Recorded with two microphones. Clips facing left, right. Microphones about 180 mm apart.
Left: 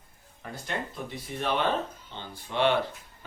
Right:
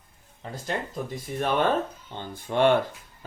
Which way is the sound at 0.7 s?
40° right (ahead or behind).